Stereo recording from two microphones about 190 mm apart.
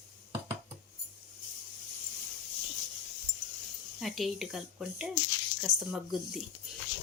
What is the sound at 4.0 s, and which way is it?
Speech, centre (ahead or behind).